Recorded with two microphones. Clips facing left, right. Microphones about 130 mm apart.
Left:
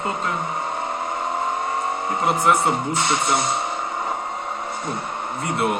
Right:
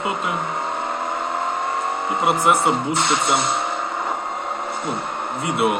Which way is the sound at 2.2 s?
5° right (ahead or behind).